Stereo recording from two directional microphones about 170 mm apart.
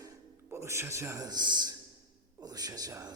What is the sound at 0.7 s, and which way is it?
Speech, 15° right (ahead or behind).